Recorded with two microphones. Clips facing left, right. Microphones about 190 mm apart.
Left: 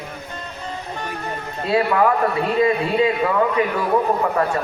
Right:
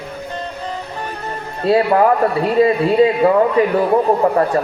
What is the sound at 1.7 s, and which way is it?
A man's voice, 35° right (ahead or behind).